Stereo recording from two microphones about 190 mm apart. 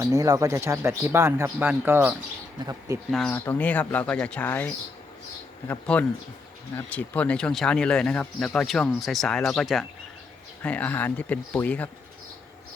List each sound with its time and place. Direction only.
0.0 s speech: 15° right (ahead or behind)
3.1 s speech: 5° left (ahead or behind)